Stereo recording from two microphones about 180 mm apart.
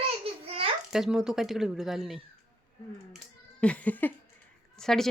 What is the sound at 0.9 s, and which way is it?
A woman's voice, 5° right (ahead or behind).